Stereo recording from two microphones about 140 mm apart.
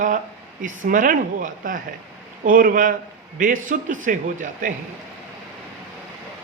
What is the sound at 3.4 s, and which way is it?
A man's voice, 70° right (ahead or behind).